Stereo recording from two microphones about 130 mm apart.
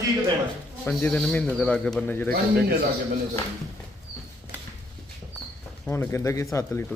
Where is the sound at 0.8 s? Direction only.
10° left (ahead or behind).